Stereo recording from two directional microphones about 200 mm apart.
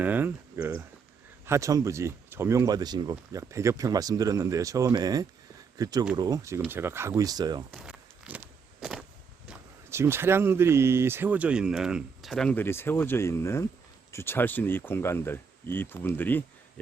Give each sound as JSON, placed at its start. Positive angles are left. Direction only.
{"t": 0.0, "sound": "speech", "side_deg": -10}
{"t": 7.7, "sound": "walk", "side_deg": -5}
{"t": 9.5, "sound": "speech", "side_deg": -10}